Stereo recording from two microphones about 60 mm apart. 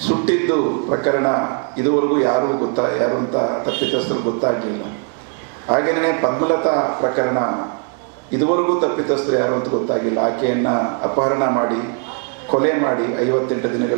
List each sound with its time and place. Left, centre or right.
0.0 s a man's voice: centre